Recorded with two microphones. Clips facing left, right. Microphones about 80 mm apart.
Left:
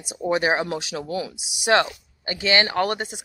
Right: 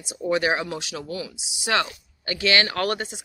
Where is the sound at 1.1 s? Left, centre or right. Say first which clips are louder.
Left 4 dB; left.